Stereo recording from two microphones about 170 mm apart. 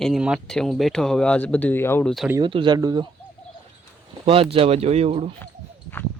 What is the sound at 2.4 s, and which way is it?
Speech, 30° right (ahead or behind).